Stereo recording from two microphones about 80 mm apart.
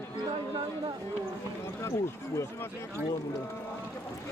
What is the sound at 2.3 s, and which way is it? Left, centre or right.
Speech, left.